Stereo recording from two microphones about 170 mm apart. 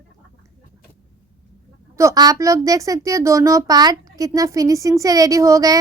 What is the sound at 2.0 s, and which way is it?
A woman's voice, 20° right (ahead or behind).